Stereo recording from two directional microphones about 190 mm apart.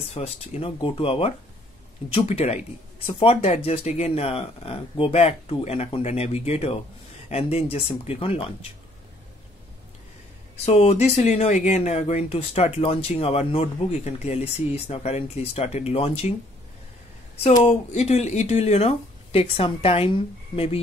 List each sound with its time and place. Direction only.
0.1 s speech: 30° left (ahead or behind)
10.6 s speech: 35° left (ahead or behind)
17.4 s speech: 35° left (ahead or behind)